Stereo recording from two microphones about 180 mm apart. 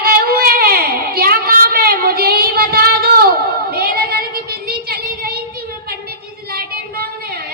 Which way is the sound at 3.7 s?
55° right (ahead or behind).